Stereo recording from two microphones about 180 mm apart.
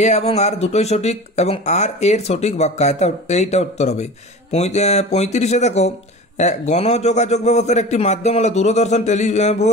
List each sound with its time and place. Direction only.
0.0 s speech: 35° left (ahead or behind)